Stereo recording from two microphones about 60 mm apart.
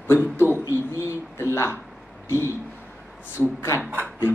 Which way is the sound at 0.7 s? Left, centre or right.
Left.